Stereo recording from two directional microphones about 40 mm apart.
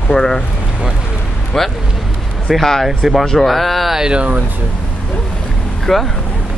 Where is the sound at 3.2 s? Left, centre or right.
Centre.